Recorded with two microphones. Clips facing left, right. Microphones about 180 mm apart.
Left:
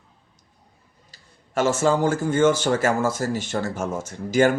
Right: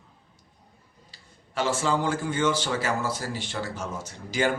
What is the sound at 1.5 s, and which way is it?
Speech, 45° left (ahead or behind).